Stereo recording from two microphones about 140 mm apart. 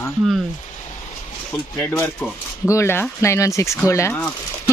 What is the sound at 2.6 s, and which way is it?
Speech, 20° left (ahead or behind).